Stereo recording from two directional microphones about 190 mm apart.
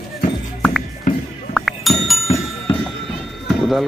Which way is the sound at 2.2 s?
30° left (ahead or behind).